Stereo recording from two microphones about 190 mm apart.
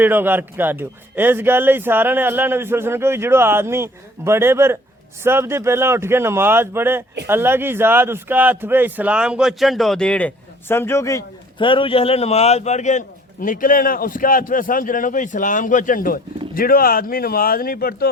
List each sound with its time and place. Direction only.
0.0 s a man's voice: 10° right (ahead or behind); by 18.1 s 55° left (ahead or behind)